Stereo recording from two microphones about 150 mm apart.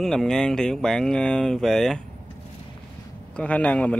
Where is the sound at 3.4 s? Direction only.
10° left (ahead or behind).